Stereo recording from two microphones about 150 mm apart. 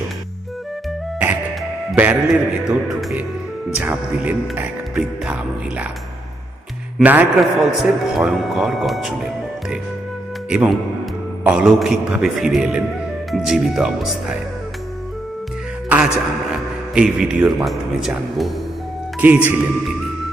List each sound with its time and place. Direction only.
2.0 s a man's voice: 10° right (ahead or behind)
7.0 s a man's voice: 10° right (ahead or behind)
15.9 s a man's voice: 10° right (ahead or behind)
19.2 s speech: 10° right (ahead or behind)